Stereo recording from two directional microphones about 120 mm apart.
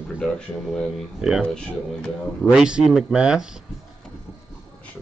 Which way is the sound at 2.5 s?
5° right (ahead or behind).